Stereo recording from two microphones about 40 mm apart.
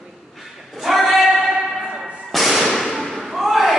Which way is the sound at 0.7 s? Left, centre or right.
Centre.